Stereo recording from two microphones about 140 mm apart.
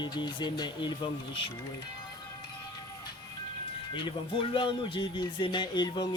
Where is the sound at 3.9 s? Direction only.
35° left (ahead or behind).